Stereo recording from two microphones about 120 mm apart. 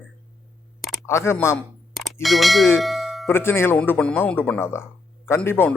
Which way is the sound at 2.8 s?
Centre (ahead or behind).